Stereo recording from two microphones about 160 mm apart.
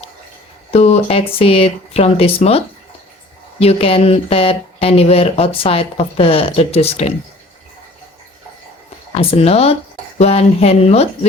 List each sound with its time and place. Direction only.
0.7 s speech: 40° left (ahead or behind)
9.1 s speech: 40° left (ahead or behind)